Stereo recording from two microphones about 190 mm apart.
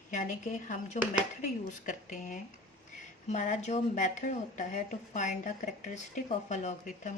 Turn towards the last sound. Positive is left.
turn(degrees=40)  # may be behind; listen again after turning